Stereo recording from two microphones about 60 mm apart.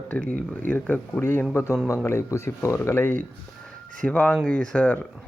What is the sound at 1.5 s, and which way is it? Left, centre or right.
Speech, left.